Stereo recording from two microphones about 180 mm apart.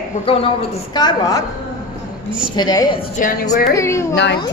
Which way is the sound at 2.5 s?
20° left (ahead or behind).